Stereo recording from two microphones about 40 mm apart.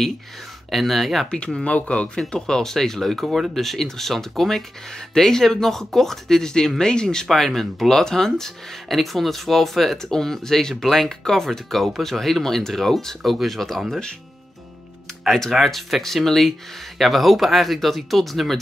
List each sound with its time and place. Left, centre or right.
0.7 s speech: centre
1.3 s speech: left
15.2 s speech: centre
15.5 s speech: centre